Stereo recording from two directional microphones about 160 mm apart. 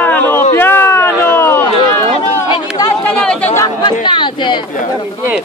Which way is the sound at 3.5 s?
30° left (ahead or behind).